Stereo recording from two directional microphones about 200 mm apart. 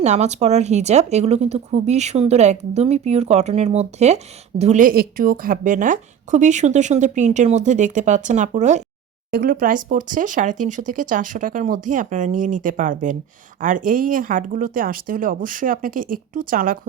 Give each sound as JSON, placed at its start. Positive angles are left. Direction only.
{"t": 0.0, "sound": "speech", "side_deg": -35}